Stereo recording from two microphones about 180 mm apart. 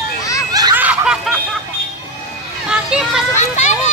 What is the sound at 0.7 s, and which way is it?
Snicker, 10° right (ahead or behind).